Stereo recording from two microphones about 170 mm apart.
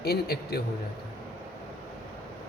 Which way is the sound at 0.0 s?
70° left (ahead or behind).